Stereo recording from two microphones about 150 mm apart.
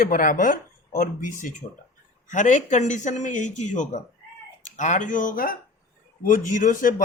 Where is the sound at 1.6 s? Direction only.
45° left (ahead or behind); by 5.6 s 70° left (ahead or behind).